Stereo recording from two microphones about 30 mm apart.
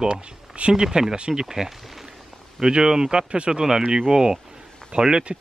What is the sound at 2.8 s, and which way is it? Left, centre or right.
Speech, right.